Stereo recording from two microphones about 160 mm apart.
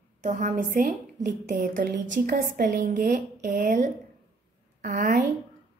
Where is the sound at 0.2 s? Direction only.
50° right (ahead or behind).